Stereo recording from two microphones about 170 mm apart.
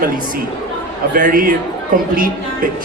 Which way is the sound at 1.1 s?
55° right (ahead or behind).